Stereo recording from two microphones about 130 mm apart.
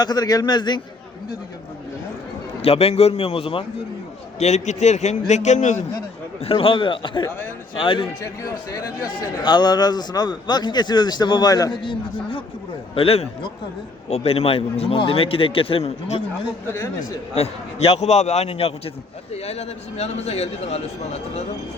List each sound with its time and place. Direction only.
0.0 s speech: 30° left (ahead or behind)
2.6 s a man's voice: 50° left (ahead or behind)
4.4 s a man's voice: 60° left (ahead or behind)
6.4 s speech: 45° left (ahead or behind)
7.3 s a man's voice: 15° left (ahead or behind)
7.8 s speech: 40° left (ahead or behind)
8.2 s speech: 25° left (ahead or behind)
9.4 s a man's voice: 35° left (ahead or behind); by 16.2 s 55° left (ahead or behind)
16.7 s speech: 20° left (ahead or behind)
17.3 s a man's voice: 50° left (ahead or behind)